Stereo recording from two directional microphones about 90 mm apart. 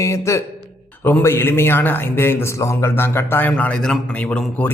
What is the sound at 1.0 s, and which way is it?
A man's voice, 25° left (ahead or behind).